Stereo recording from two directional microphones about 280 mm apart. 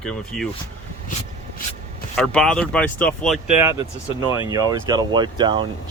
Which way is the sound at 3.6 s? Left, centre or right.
Centre.